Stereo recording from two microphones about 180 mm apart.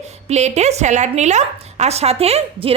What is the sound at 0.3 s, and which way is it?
A woman's voice, 40° right (ahead or behind).